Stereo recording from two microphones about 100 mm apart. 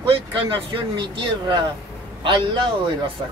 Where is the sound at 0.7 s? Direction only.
55° right (ahead or behind).